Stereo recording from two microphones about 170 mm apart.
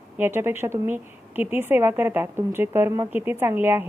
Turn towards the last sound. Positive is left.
turn(degrees=-15)  # may be behind; listen again after turning